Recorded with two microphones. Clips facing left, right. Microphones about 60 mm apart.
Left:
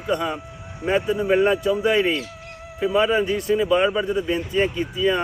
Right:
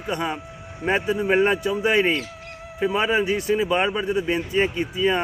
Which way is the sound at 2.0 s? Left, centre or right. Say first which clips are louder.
Even; right.